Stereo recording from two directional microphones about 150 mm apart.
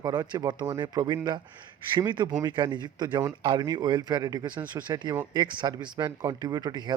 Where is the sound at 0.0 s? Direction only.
25° right (ahead or behind).